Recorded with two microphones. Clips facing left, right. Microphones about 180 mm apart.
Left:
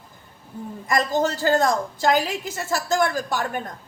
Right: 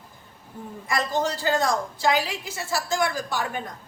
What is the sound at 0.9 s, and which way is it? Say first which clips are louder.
A woman's voice: left 4 dB; 45° left (ahead or behind).